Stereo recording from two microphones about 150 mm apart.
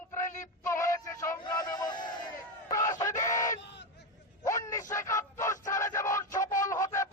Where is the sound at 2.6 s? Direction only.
25° left (ahead or behind).